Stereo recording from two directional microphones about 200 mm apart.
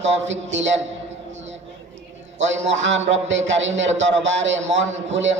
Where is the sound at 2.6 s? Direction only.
65° right (ahead or behind).